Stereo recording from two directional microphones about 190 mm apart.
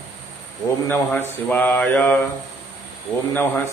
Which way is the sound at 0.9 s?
10° left (ahead or behind).